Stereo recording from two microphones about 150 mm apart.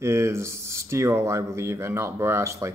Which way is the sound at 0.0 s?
20° right (ahead or behind).